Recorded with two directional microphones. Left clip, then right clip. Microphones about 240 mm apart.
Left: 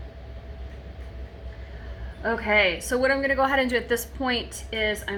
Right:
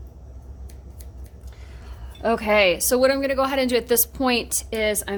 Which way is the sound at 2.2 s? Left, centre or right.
Right.